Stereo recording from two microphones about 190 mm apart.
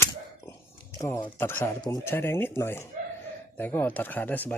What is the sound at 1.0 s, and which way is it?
Speech, 15° left (ahead or behind).